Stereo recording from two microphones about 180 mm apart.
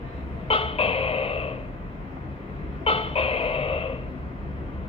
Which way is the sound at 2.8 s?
30° left (ahead or behind).